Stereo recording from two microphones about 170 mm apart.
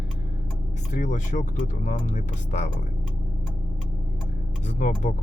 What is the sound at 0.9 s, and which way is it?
Speech, 45° left (ahead or behind).